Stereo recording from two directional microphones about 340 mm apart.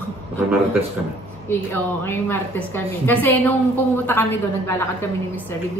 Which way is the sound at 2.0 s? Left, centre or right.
Centre.